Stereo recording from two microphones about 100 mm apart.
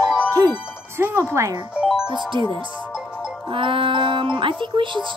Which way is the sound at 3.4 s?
60° right (ahead or behind).